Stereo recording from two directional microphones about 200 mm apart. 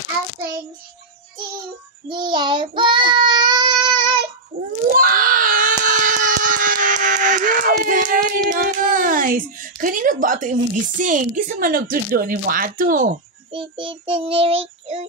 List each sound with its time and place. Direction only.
2.0 s child singing: 25° right (ahead or behind)
4.6 s wail: 45° right (ahead or behind)
7.8 s a sound: 45° right (ahead or behind)
8.5 s speech: 45° right (ahead or behind)
13.5 s child singing: 25° right (ahead or behind)